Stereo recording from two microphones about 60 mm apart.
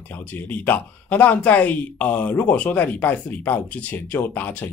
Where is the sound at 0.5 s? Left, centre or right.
Left.